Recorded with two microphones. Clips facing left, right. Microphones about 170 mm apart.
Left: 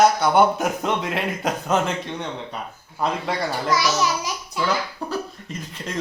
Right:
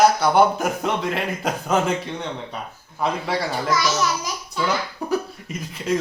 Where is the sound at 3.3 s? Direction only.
Centre (ahead or behind).